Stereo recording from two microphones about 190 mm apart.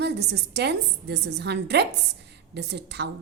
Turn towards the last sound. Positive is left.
turn(degrees=-60)  # may be behind; listen again after turning